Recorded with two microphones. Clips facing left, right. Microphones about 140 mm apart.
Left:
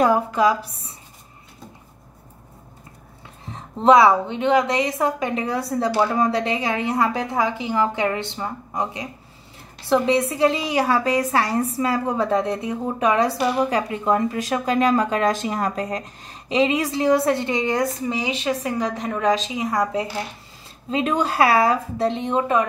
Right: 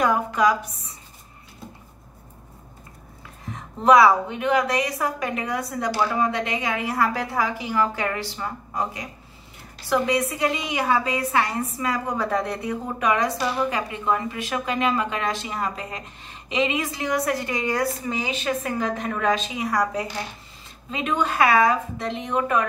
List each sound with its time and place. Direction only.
0.0 s a woman's voice: 30° left (ahead or behind)
3.4 s a woman's voice: 25° left (ahead or behind)
20.9 s a woman's voice: 35° left (ahead or behind)